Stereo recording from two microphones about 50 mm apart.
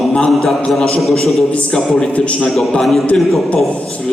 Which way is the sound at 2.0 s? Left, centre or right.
Left.